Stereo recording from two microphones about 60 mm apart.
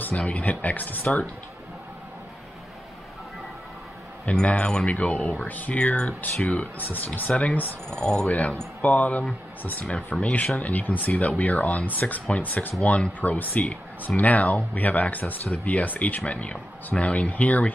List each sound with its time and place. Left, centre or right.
0.1 s speech: left
4.3 s speech: left